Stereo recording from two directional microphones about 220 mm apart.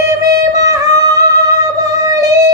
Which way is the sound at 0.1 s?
15° right (ahead or behind).